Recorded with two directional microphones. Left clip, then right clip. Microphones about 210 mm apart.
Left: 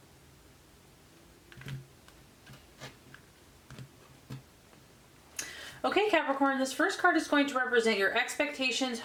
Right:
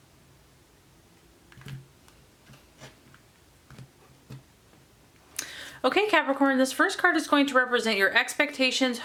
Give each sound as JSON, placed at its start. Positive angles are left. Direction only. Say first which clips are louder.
{"t": 5.8, "sound": "speech", "louder": "right 5 dB", "side_deg": -25}